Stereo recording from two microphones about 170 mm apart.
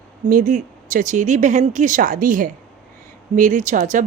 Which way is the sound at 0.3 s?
50° right (ahead or behind).